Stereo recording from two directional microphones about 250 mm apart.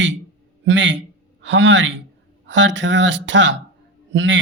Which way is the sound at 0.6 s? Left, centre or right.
Right.